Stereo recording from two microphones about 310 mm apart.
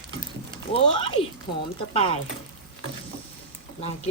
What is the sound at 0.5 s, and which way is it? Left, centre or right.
Speech, centre.